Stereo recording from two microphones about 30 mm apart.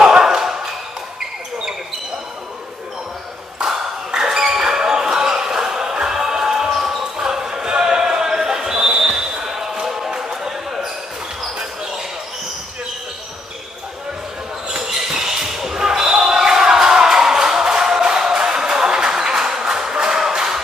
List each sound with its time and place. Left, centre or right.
0.0 s a sound: centre
3.6 s a sound: centre
6.7 s basketball bounce: centre
7.0 s basketball bounce: centre
10.1 s music: centre
14.7 s basketball bounce: right
18.3 s music: right